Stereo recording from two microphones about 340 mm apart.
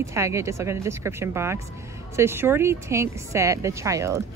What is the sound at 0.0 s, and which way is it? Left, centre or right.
A woman's voice, centre.